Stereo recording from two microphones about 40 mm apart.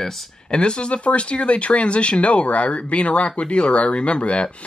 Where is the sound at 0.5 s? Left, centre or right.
Left.